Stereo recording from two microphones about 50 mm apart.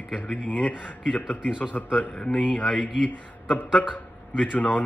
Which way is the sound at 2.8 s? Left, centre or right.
Centre.